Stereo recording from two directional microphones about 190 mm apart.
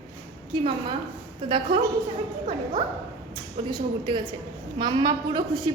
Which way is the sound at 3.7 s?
25° right (ahead or behind).